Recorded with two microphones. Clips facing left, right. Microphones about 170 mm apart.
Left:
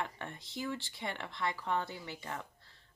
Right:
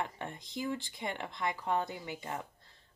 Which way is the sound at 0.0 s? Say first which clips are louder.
Right 2 dB; 15° right (ahead or behind).